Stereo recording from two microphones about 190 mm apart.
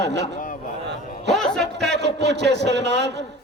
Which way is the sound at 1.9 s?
65° right (ahead or behind).